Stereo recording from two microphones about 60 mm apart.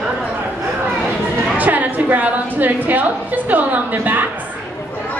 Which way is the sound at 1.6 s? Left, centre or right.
Right.